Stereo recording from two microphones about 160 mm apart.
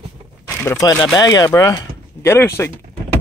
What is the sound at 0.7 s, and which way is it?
Speech, 20° left (ahead or behind).